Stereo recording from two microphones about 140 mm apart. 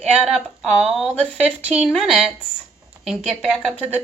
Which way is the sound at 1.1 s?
10° left (ahead or behind).